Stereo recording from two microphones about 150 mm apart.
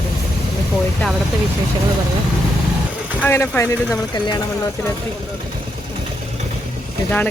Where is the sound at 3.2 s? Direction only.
15° left (ahead or behind).